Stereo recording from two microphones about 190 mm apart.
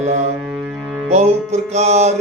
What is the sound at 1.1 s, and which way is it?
Speech, 35° right (ahead or behind).